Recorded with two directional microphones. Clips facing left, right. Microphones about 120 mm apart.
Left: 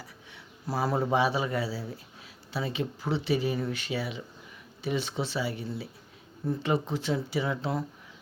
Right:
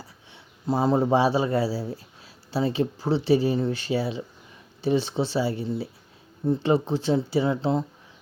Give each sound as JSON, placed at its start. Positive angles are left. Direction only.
{"t": 0.0, "sound": "a man's voice", "side_deg": -25}